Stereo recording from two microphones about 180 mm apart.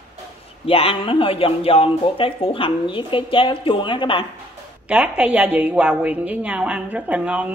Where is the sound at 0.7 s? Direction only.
30° left (ahead or behind).